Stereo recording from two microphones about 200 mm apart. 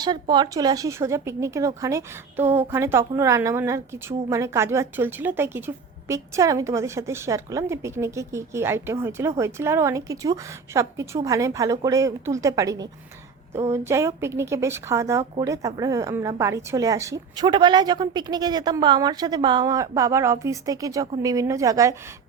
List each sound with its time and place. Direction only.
0.0 s a woman's voice: 20° right (ahead or behind)